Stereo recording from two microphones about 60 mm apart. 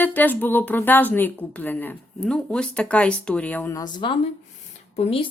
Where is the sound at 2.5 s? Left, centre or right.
Centre.